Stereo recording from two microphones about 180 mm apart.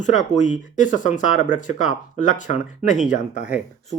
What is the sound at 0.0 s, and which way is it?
Speech, 45° left (ahead or behind).